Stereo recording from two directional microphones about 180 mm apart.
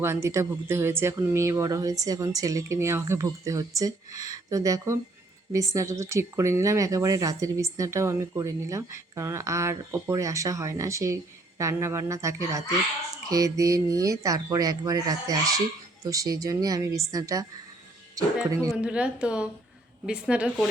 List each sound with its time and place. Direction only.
0.0 s speech: 15° right (ahead or behind)
18.8 s speech: 5° right (ahead or behind)